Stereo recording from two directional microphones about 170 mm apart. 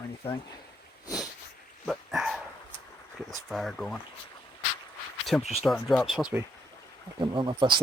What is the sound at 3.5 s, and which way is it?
Speech, centre (ahead or behind).